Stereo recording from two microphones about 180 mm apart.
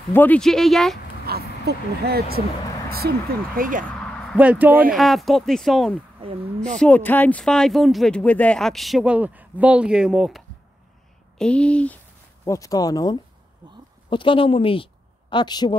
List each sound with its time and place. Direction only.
0.1 s speech: 10° left (ahead or behind)
1.2 s speech: 60° right (ahead or behind)
4.4 s speech: 10° right (ahead or behind)
6.2 s speech: 30° right (ahead or behind)
6.8 s speech: 10° left (ahead or behind)
12.4 s speech: 20° left (ahead or behind)